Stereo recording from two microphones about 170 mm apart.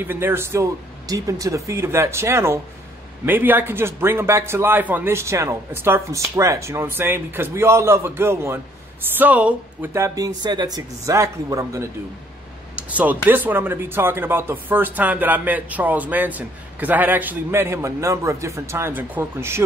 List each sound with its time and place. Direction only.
0.0 s speech: 10° right (ahead or behind)